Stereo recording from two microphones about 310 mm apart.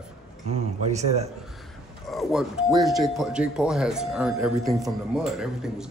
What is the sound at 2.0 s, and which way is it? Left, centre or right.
Speech, centre.